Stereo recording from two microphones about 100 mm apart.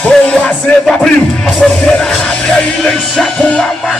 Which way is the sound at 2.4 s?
5° left (ahead or behind).